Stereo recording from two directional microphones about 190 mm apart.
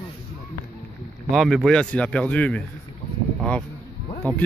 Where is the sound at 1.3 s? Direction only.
Centre (ahead or behind).